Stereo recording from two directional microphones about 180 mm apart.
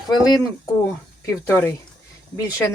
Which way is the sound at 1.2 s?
15° left (ahead or behind).